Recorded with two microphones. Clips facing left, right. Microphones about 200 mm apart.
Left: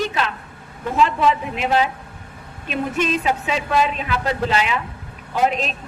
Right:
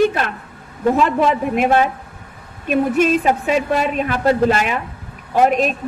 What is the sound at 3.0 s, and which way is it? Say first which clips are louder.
A man's voice: right 5 dB; 45° right (ahead or behind).